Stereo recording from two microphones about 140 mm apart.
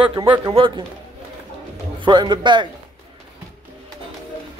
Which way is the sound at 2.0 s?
30° right (ahead or behind).